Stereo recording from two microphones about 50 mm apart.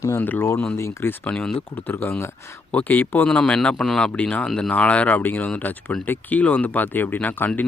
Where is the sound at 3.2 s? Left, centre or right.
Left.